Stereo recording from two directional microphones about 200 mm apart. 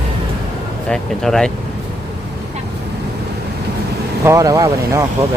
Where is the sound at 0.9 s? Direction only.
5° left (ahead or behind).